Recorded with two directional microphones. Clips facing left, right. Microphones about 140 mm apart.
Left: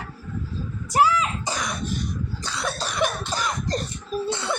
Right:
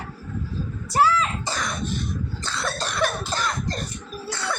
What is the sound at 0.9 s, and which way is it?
Throat clearing, 15° left (ahead or behind).